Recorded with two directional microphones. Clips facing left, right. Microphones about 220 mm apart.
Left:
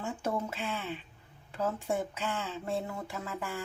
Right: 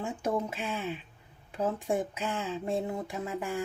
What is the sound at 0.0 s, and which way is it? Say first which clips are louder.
Speech: right 3 dB; 15° right (ahead or behind).